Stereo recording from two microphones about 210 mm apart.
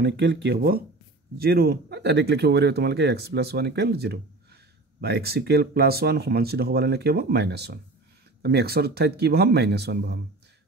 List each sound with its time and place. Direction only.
0.0 s speech: 55° right (ahead or behind)